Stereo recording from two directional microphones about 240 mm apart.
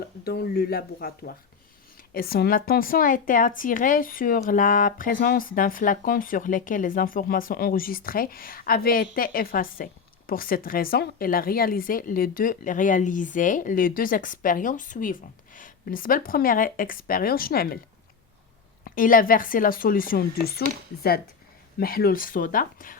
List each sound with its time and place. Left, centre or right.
0.3 s speech: left
18.9 s speech: left